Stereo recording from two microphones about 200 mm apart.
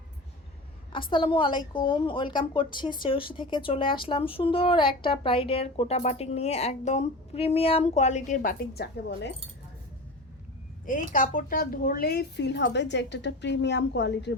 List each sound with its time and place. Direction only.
0.9 s a woman's voice: 25° left (ahead or behind)
8.4 s a woman's voice: 50° left (ahead or behind)
11.1 s speech: 40° left (ahead or behind); by 14.3 s 60° left (ahead or behind)